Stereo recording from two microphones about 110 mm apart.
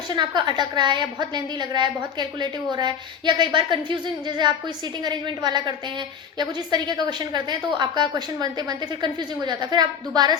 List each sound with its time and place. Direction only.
0.1 s a woman's voice: 40° right (ahead or behind)